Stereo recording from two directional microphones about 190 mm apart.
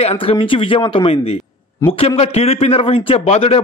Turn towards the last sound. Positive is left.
turn(degrees=30)  # may be behind; listen again after turning